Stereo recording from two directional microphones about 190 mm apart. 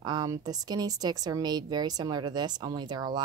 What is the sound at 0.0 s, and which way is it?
Speech, 20° right (ahead or behind).